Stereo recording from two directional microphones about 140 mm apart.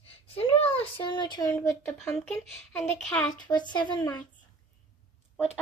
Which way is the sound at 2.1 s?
5° left (ahead or behind).